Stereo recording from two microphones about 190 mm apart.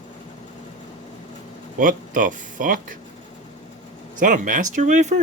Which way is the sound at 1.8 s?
45° right (ahead or behind).